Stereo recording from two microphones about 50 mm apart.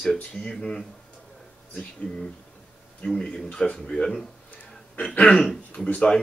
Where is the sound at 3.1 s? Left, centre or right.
Centre.